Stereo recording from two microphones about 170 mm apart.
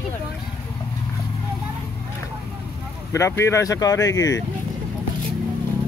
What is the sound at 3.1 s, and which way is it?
Speech, 15° left (ahead or behind).